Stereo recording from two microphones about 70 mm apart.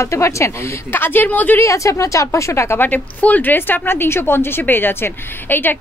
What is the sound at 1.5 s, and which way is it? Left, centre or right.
A woman's voice, left.